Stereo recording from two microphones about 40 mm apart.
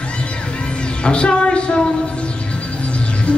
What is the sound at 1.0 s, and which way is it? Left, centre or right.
Music, left.